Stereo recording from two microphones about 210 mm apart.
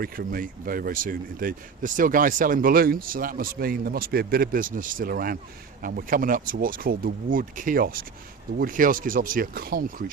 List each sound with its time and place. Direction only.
0.0 s speech: 45° right (ahead or behind)